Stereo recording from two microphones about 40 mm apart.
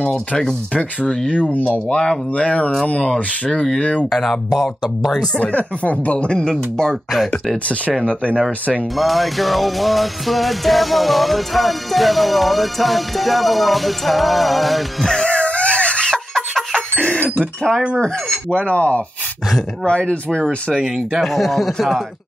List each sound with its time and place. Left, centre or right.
0.7 s speech: left
4.1 s speech: centre
5.4 s speech: left
6.1 s speech: left
8.0 s speech: left
8.9 s music: centre
15.2 s a sound: left
16.3 s a sound: centre
16.9 s a sound: left
17.7 s music: centre
18.0 s speech: left
20.8 s speech: centre
21.2 s music: centre